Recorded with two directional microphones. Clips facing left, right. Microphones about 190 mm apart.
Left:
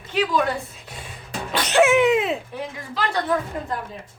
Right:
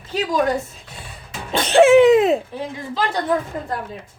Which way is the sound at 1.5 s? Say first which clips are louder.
Right 6 dB; 30° right (ahead or behind).